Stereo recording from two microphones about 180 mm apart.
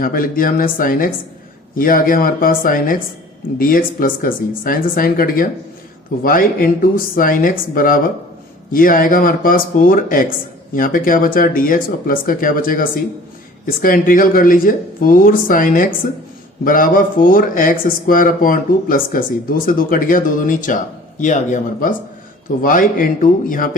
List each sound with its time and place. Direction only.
0.0 s speech: 55° left (ahead or behind)